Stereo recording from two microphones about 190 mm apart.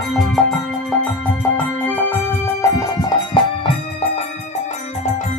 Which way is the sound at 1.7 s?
10° left (ahead or behind).